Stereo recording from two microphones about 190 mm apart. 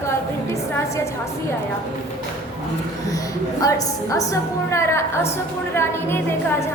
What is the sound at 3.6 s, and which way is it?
A woman's voice, 15° left (ahead or behind).